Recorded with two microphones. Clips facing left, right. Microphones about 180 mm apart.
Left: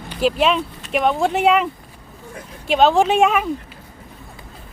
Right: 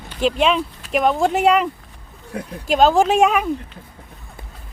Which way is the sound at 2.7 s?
Centre (ahead or behind).